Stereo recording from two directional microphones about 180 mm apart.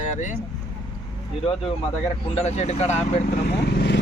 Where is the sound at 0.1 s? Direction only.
45° left (ahead or behind).